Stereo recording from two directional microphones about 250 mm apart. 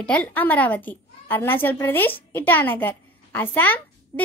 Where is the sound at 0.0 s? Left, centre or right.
Centre.